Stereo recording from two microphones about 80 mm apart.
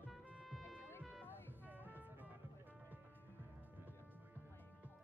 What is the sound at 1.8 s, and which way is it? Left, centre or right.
Music, right.